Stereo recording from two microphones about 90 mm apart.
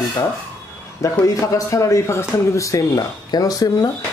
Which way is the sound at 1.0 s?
35° left (ahead or behind).